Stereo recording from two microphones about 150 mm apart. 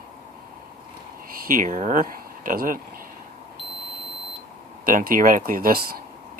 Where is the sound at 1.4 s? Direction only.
65° right (ahead or behind).